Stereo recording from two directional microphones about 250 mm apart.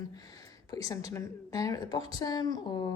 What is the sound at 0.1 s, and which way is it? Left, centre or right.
A woman's voice, centre.